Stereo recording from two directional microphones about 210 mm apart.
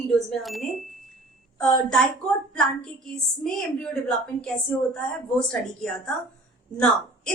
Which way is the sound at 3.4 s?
5° left (ahead or behind).